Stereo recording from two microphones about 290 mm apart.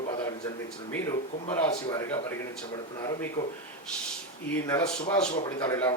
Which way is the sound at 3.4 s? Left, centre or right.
Left.